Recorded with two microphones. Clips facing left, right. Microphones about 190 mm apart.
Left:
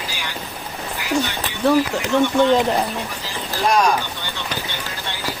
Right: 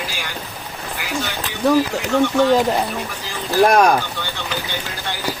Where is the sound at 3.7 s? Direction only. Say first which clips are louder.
Right 1 dB; 55° right (ahead or behind).